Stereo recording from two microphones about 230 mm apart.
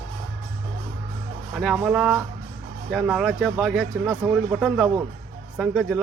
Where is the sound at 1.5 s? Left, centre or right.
Centre.